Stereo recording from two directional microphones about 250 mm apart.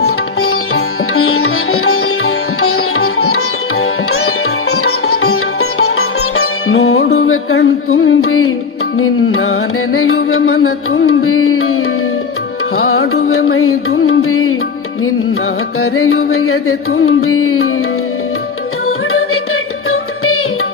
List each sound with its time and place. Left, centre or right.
0.0 s sitar: left
9.0 s music: left
13.0 s music: left
13.3 s music: left
15.8 s music: left
18.9 s music: left